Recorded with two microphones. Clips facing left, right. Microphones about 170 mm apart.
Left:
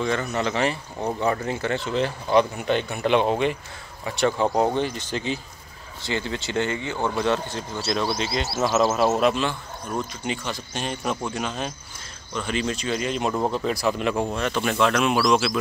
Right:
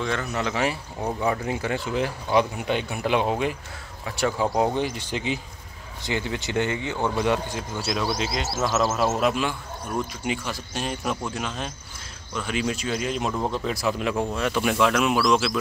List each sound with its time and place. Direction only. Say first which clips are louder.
0.0 s a man's voice: left 2 dB; centre (ahead or behind)